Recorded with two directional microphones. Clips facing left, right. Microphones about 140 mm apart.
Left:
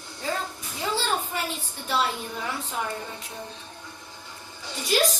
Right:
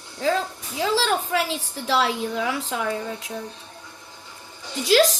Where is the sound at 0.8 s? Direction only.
90° right.